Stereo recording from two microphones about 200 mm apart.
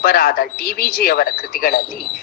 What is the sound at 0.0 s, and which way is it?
Speech, 45° left (ahead or behind).